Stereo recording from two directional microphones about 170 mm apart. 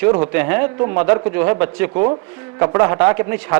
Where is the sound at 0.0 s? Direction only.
15° right (ahead or behind).